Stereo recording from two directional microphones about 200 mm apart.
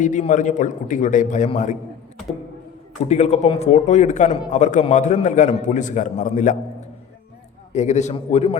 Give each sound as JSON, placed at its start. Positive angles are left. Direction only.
{"t": 0.0, "sound": "a man's voice", "side_deg": 40}
{"t": 3.0, "sound": "a man's voice", "side_deg": 35}
{"t": 7.7, "sound": "a man's voice", "side_deg": 35}